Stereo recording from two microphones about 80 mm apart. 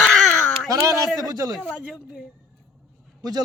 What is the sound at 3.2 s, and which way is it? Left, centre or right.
Speech, right.